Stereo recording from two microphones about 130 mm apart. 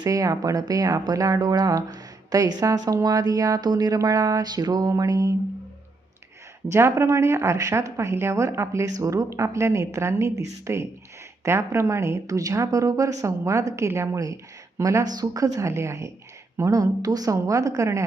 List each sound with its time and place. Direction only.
0.0 s speech: 25° right (ahead or behind)
6.7 s speech: 20° right (ahead or behind)